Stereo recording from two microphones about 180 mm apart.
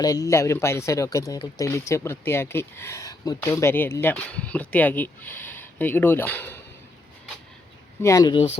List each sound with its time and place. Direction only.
0.0 s speech: 20° left (ahead or behind)
8.0 s speech: 20° left (ahead or behind)